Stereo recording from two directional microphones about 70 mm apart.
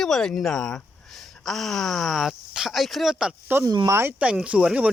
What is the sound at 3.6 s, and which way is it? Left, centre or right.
Speech, right.